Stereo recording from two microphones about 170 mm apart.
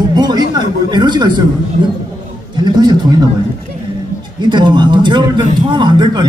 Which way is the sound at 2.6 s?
25° right (ahead or behind).